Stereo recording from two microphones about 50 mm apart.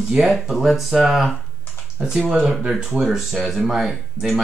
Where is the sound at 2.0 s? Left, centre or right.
Centre.